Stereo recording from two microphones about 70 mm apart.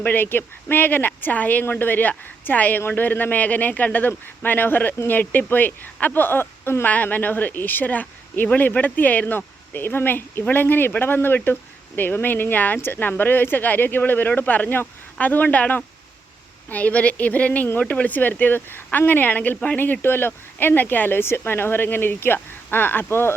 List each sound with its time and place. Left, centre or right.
0.0 s speech: left
6.8 s speech: left